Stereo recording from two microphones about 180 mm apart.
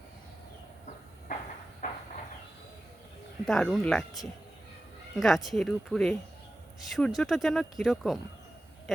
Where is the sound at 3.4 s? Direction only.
Centre (ahead or behind).